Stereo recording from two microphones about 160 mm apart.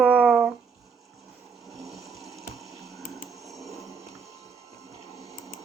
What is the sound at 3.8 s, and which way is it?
Music, 20° right (ahead or behind).